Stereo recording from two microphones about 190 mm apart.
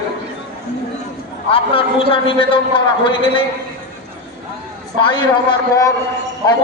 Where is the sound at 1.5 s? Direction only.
30° left (ahead or behind).